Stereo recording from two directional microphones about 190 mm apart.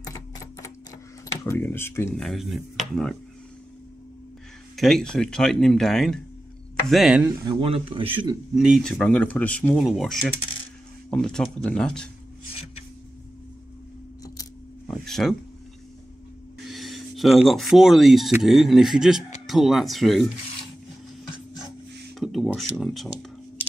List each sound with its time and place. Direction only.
0.0 s typewriter: 15° left (ahead or behind)
1.4 s speech: 15° left (ahead or behind)
2.2 s speech: centre (ahead or behind)
4.7 s speech: centre (ahead or behind)
7.5 s a man's voice: 30° right (ahead or behind)
8.5 s speech: centre (ahead or behind)
14.2 s scissors: 20° left (ahead or behind)
14.9 s a sound: centre (ahead or behind)
16.6 s speech: centre (ahead or behind)
22.2 s a sound: 5° right (ahead or behind)
22.5 s speech: centre (ahead or behind)